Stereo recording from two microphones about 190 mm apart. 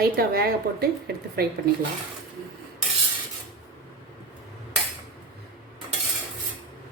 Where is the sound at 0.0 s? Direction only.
55° right (ahead or behind).